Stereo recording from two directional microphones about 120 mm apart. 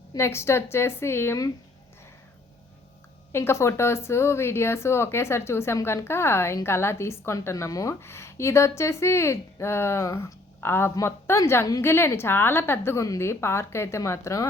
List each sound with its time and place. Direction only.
0.2 s speech: 20° left (ahead or behind)
3.3 s speech: 20° left (ahead or behind)